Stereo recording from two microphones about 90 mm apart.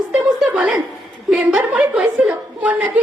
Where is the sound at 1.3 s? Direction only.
15° right (ahead or behind).